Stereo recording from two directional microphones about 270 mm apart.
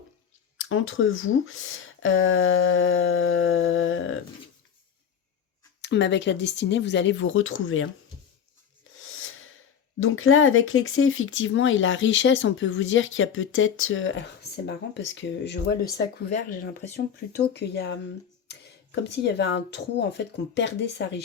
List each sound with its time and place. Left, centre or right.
0.6 s speech: left
5.8 s speech: left
9.0 s a sound: left
10.0 s speech: left